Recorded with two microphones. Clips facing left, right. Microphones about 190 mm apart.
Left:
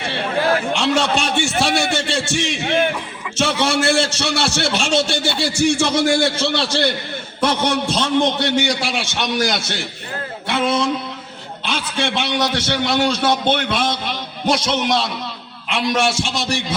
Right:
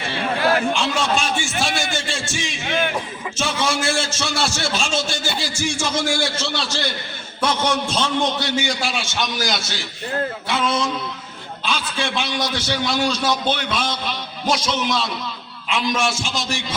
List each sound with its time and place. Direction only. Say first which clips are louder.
0.7 s a man's voice: left 3 dB; 70° left (ahead or behind)